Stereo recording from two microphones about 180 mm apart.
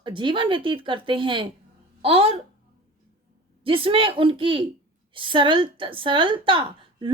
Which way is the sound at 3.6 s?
30° right (ahead or behind).